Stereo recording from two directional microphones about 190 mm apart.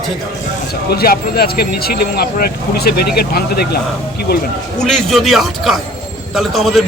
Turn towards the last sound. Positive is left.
turn(degrees=0)  # may be behind; listen again after turning